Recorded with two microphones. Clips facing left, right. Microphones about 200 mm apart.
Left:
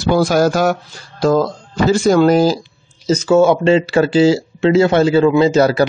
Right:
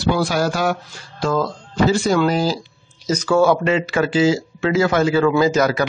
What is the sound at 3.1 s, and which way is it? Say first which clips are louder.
Speech: left 4 dB; 25° left (ahead or behind).